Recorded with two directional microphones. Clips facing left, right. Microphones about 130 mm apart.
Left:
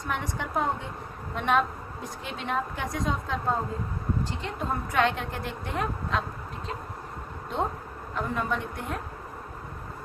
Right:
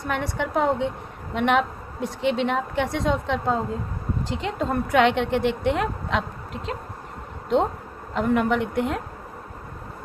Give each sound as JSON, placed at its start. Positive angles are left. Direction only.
{"t": 0.0, "sound": "a woman's voice", "side_deg": -70}
{"t": 8.1, "sound": "a woman's voice", "side_deg": -75}